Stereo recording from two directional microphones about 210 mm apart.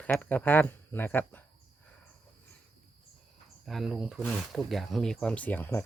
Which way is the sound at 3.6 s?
Centre (ahead or behind).